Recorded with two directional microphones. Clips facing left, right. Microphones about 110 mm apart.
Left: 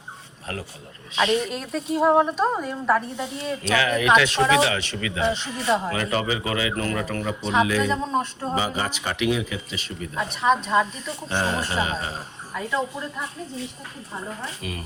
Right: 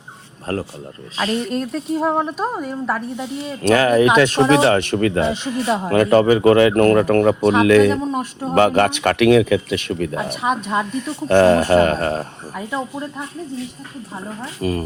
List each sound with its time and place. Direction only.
0.5 s speech: 40° right (ahead or behind)
1.2 s a woman's voice: centre (ahead or behind)
3.6 s speech: 45° right (ahead or behind)
5.3 s speech: 15° right (ahead or behind)
5.9 s speech: 50° right (ahead or behind)
10.4 s speech: 5° right (ahead or behind)
10.9 s speech: 60° right (ahead or behind)
14.6 s speech: 40° right (ahead or behind)